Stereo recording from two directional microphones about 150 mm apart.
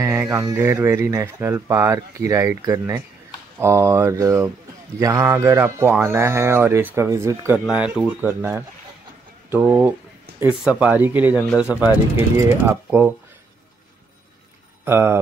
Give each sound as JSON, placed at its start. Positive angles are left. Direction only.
{"t": 0.0, "sound": "speech", "side_deg": -20}
{"t": 7.5, "sound": "speech", "side_deg": -5}
{"t": 14.9, "sound": "speech", "side_deg": -15}